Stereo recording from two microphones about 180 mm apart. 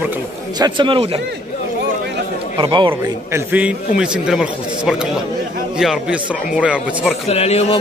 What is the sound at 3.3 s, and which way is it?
Speech, 10° right (ahead or behind).